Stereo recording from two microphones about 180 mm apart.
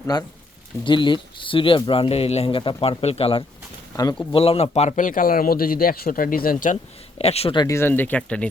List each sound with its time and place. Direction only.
0.1 s speech: 20° left (ahead or behind); by 6.7 s 50° left (ahead or behind)
7.2 s speech: 35° left (ahead or behind); by 8.4 s 5° left (ahead or behind)